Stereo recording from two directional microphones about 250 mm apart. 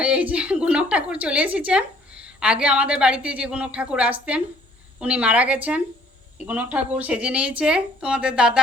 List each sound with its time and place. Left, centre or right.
0.0 s speech: centre